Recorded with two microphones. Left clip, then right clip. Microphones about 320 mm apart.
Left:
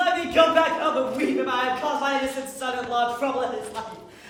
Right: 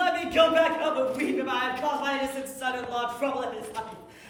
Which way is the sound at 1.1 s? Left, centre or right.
Centre.